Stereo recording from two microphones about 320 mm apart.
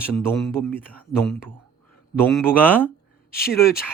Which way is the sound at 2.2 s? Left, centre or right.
Centre.